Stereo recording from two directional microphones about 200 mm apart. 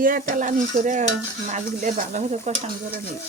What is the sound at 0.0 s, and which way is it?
Stir, 45° right (ahead or behind).